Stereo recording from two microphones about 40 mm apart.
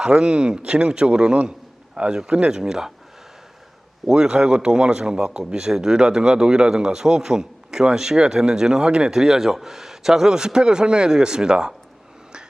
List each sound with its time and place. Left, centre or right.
0.0 s speech: right
4.0 s speech: centre